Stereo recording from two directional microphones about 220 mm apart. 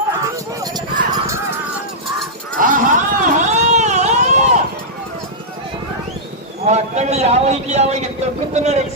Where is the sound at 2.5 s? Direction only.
35° right (ahead or behind).